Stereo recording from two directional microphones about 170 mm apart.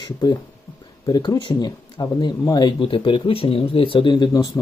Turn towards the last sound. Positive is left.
turn(degrees=20)  # may be behind; listen again after turning